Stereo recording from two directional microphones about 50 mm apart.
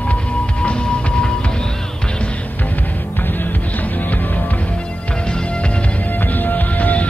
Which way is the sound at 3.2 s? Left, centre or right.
Left.